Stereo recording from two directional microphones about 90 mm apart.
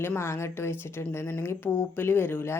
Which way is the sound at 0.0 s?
25° left (ahead or behind).